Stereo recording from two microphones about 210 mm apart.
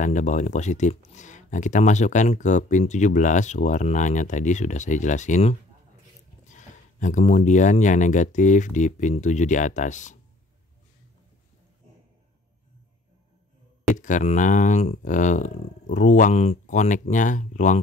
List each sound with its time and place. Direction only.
0.0 s speech: 35° left (ahead or behind)
13.9 s speech: 35° left (ahead or behind)